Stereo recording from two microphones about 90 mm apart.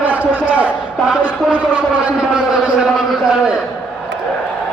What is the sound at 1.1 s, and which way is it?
A man's voice, 15° right (ahead or behind).